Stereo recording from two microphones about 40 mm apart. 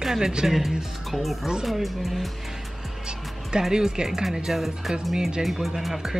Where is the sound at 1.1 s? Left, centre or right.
Centre.